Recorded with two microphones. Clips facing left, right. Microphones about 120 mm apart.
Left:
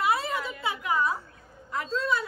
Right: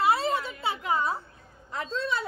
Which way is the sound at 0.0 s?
30° right (ahead or behind).